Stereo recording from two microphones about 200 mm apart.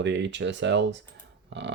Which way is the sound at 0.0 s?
65° right (ahead or behind).